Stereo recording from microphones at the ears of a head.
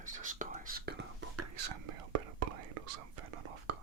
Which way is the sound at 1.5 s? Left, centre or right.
Right.